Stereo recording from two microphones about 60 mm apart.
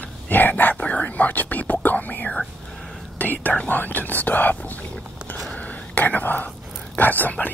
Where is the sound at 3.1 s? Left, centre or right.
Left.